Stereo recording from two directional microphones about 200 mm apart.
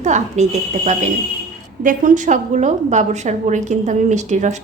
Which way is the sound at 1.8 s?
40° right (ahead or behind).